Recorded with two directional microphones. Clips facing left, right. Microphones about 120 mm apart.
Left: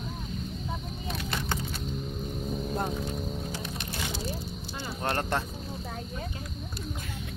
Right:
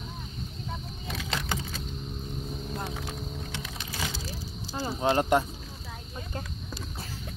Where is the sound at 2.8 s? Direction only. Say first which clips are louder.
Left 4 dB; 85° right.